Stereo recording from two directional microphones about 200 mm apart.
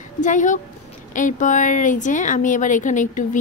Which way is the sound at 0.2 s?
40° left (ahead or behind).